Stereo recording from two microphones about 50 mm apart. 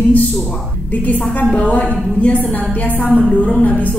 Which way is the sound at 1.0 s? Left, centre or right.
Left.